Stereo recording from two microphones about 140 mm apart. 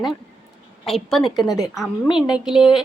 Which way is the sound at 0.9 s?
Centre (ahead or behind).